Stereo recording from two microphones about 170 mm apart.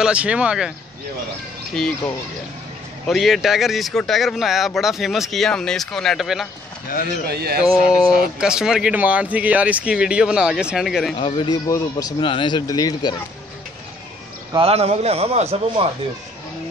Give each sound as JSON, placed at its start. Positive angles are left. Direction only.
{"t": 0.0, "sound": "speech", "side_deg": -5}
{"t": 1.8, "sound": "speech", "side_deg": 5}
{"t": 7.2, "sound": "speech", "side_deg": -65}
{"t": 7.6, "sound": "speech", "side_deg": 20}
{"t": 8.1, "sound": "speech", "side_deg": -5}
{"t": 11.1, "sound": "speech", "side_deg": 30}
{"t": 14.5, "sound": "a man's voice", "side_deg": -35}